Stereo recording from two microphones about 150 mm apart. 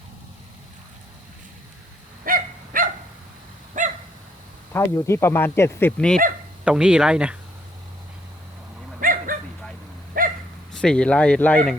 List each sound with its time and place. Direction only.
2.2 s dog: 70° right (ahead or behind)
4.7 s speech: 20° left (ahead or behind)
6.7 s speech: 5° right (ahead or behind)
9.0 s dog: 65° right (ahead or behind)
10.7 s speech: 5° left (ahead or behind)